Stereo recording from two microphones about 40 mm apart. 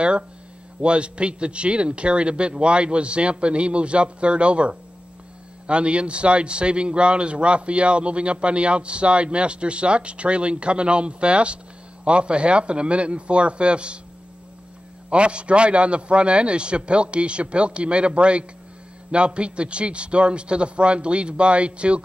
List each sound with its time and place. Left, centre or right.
0.7 s speech: right
15.0 s speech: right